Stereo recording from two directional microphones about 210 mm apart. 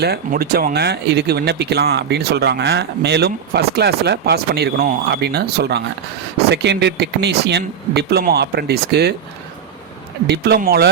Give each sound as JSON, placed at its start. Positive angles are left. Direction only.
{"t": 0.0, "sound": "speech", "side_deg": -45}
{"t": 10.2, "sound": "speech", "side_deg": -50}